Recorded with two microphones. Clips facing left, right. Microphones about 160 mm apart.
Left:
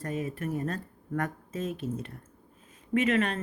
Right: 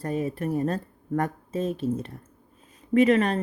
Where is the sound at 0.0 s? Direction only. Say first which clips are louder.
Right 5 dB; 35° right (ahead or behind).